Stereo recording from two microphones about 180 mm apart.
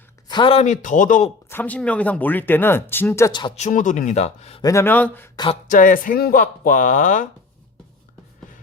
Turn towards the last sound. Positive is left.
turn(degrees=45)  # may be behind; listen again after turning